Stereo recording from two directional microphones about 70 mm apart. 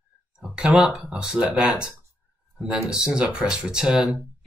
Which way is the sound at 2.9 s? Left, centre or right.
Centre.